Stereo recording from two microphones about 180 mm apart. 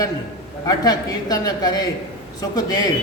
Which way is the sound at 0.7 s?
20° left (ahead or behind).